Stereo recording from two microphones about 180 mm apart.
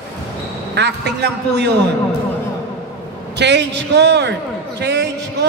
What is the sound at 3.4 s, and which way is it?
A man's voice, 70° right (ahead or behind).